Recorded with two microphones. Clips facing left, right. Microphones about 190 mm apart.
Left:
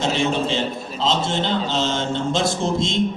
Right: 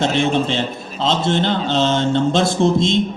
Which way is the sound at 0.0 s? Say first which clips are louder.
Right 4 dB; 60° right (ahead or behind).